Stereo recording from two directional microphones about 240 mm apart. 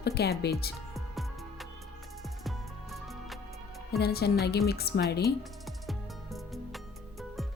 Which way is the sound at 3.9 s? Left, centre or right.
Left.